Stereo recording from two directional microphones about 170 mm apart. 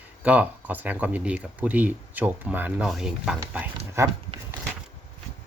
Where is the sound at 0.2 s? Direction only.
10° right (ahead or behind).